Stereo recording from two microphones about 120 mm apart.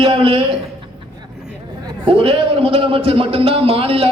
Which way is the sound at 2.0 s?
50° right (ahead or behind).